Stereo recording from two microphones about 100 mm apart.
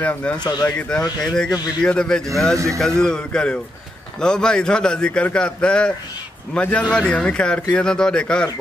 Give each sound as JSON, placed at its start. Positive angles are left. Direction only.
{"t": 0.0, "sound": "a man's voice", "side_deg": 10}
{"t": 0.4, "sound": "speech", "side_deg": 45}
{"t": 0.7, "sound": "a man's voice", "side_deg": 15}
{"t": 2.5, "sound": "a man's voice", "side_deg": -30}
{"t": 3.0, "sound": "a man's voice", "side_deg": 5}